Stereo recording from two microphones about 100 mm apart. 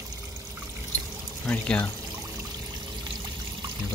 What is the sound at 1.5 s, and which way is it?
Speech, 15° left (ahead or behind).